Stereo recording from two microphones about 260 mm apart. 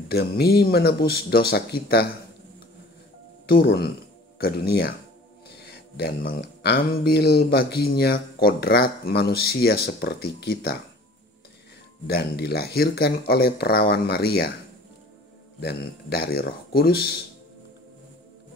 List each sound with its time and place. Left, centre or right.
0.1 s speech: left
3.4 s speech: left
12.1 s speech: left
15.6 s speech: left